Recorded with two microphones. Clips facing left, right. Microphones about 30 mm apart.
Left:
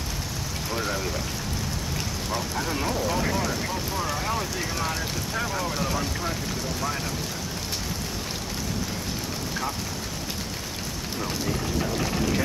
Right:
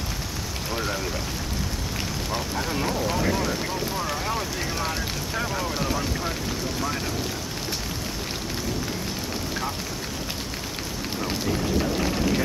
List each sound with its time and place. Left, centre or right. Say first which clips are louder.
0.7 s speech: even; centre
2.3 s speech: even; centre
11.1 s speech: right 2 dB; centre